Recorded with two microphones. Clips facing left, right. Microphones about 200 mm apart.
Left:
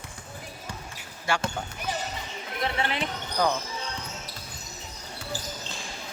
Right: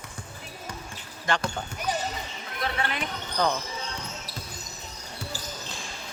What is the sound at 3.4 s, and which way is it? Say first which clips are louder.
Speech: left 1 dB; 10° left (ahead or behind).